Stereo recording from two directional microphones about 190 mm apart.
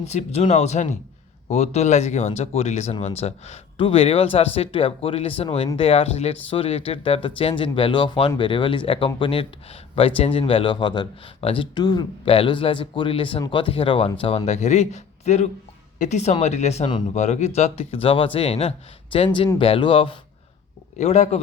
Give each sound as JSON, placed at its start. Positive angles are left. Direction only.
{"t": 0.0, "sound": "speech", "side_deg": 35}